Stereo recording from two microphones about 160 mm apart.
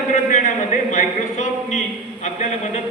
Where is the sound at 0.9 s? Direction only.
45° left (ahead or behind).